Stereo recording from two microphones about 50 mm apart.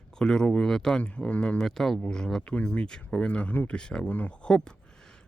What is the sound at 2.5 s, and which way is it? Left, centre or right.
Speech, left.